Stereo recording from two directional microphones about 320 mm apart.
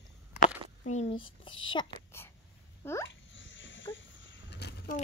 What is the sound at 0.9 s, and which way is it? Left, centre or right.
A woman's voice, centre.